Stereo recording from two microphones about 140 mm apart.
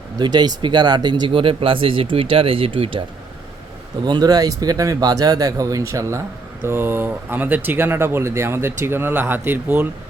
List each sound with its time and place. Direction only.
0.2 s speech: 30° right (ahead or behind)
4.0 s speech: 30° right (ahead or behind); by 9.9 s 15° right (ahead or behind)